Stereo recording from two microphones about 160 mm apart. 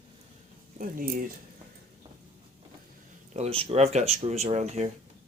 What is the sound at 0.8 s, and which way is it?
Speech, 60° right (ahead or behind).